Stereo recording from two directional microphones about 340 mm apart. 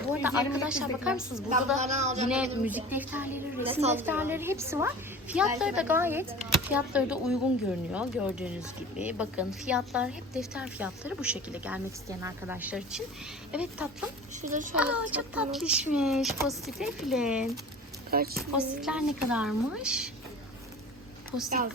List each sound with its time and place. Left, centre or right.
0.1 s a woman's voice: centre
1.8 s speech: centre
2.3 s a woman's voice: centre
14.4 s speech: right
14.8 s a woman's voice: centre
18.1 s speech: right
18.3 s a woman's voice: centre